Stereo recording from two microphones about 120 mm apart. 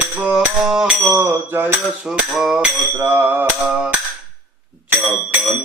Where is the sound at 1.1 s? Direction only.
15° right (ahead or behind).